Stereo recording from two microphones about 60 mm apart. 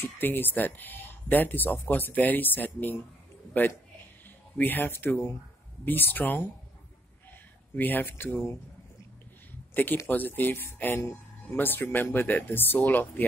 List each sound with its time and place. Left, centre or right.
0.0 s speech: left
7.7 s speech: left
10.0 s speech: left